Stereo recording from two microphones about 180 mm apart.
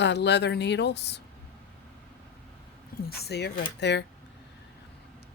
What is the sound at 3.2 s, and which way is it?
Speech, 65° left (ahead or behind).